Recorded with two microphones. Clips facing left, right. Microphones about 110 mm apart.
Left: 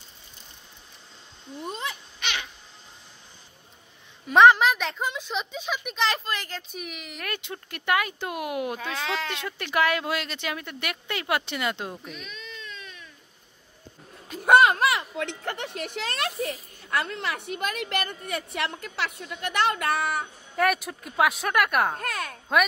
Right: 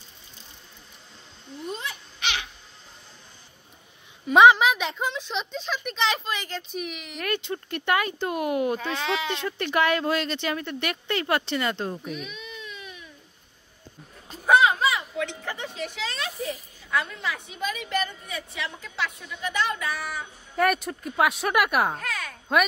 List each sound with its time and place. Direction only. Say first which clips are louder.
4.3 s a woman's voice: right 1 dB; 5° right (ahead or behind)
12.0 s baby cry: right 5 dB; 5° right (ahead or behind)
14.4 s speech: left 1 dB; 65° left (ahead or behind)
16.9 s a woman's voice: even; 65° left (ahead or behind)
20.5 s a woman's voice: right 1 dB; centre (ahead or behind)
22.0 s a woman's voice: left 2 dB; 55° left (ahead or behind)